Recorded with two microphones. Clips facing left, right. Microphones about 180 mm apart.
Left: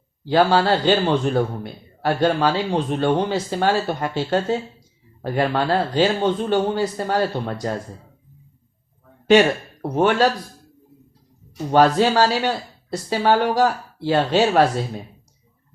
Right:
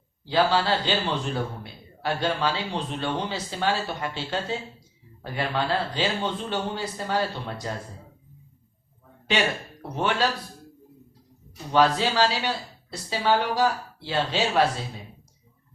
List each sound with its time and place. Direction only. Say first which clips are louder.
0.3 s a man's voice: left 6 dB; 45° left (ahead or behind)
9.9 s a man's voice: left 8 dB; 50° left (ahead or behind)
11.7 s a man's voice: left 6 dB; 50° left (ahead or behind)